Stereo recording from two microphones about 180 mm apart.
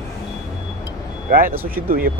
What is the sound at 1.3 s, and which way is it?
Speech, 55° right (ahead or behind).